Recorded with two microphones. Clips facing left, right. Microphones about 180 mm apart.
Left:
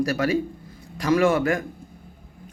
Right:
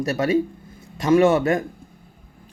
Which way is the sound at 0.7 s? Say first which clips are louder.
Right 4 dB; 25° right (ahead or behind).